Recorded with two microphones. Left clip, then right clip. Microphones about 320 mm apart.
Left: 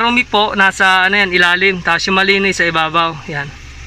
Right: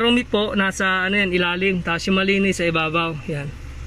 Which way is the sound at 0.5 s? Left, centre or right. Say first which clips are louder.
Left 12 dB; centre.